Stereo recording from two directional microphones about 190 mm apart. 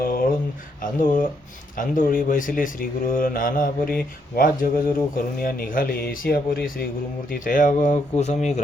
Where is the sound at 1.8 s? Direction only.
45° left (ahead or behind).